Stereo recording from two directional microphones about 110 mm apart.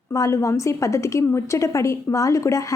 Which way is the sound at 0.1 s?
30° left (ahead or behind).